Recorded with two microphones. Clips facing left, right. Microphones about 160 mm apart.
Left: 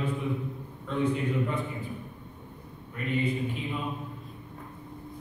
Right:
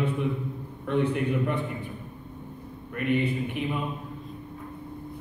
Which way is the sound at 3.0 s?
65° right (ahead or behind).